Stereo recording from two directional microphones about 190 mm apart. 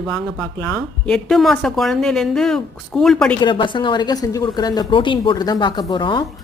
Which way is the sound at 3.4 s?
25° left (ahead or behind).